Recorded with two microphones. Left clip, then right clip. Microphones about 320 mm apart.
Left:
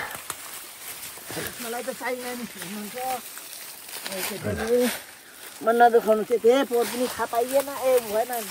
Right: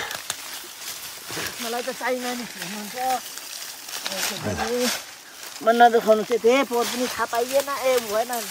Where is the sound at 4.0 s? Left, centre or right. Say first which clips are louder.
Right 4 dB; right.